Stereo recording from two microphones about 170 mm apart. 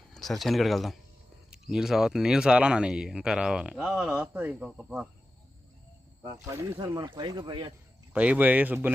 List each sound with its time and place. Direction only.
0.1 s speech: centre (ahead or behind)
6.2 s speech: 20° right (ahead or behind)
8.1 s speech: 10° right (ahead or behind)